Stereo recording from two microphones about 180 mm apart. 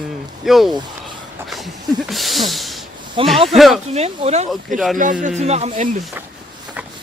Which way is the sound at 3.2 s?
30° right (ahead or behind).